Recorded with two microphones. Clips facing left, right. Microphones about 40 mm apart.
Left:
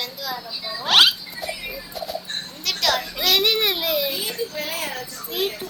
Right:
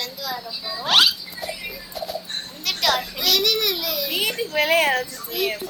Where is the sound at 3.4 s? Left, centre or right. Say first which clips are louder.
Left 2 dB; left.